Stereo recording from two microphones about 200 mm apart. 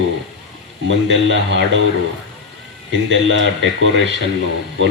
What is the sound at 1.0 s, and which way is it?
Speech, 65° right (ahead or behind).